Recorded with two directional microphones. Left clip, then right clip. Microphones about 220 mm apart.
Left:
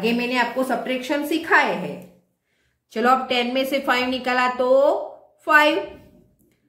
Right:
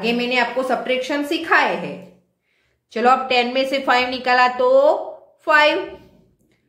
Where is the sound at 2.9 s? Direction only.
10° left (ahead or behind).